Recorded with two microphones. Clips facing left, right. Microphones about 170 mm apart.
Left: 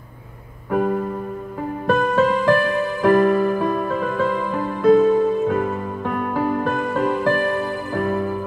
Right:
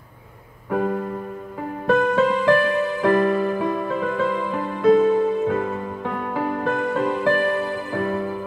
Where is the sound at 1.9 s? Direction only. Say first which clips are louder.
Even; 25° right (ahead or behind).